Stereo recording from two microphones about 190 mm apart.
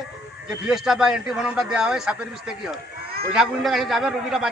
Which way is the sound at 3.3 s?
Centre (ahead or behind).